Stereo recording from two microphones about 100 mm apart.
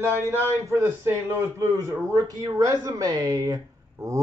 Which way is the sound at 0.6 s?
30° right (ahead or behind).